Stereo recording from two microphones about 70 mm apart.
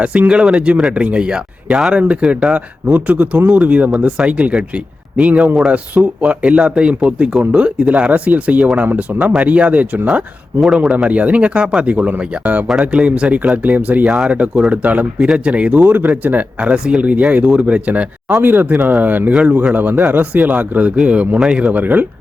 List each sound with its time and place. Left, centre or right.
0.0 s speech: centre
15.8 s speech: right